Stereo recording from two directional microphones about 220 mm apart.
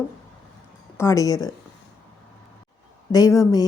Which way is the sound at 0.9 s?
15° left (ahead or behind).